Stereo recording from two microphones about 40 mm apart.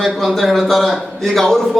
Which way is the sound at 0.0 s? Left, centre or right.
Centre.